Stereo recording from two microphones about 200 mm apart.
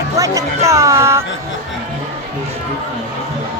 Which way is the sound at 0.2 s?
15° right (ahead or behind).